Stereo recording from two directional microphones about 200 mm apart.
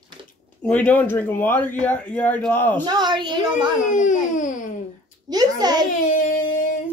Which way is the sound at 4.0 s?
40° left (ahead or behind).